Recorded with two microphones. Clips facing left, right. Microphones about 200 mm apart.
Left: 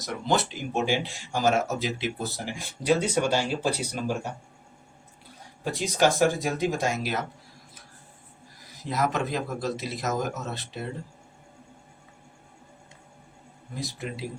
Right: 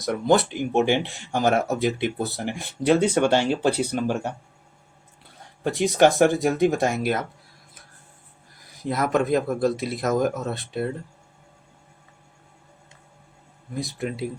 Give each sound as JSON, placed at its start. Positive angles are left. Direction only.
{"t": 0.0, "sound": "speech", "side_deg": -55}
{"t": 5.6, "sound": "speech", "side_deg": -60}
{"t": 8.8, "sound": "speech", "side_deg": -55}
{"t": 13.7, "sound": "speech", "side_deg": -55}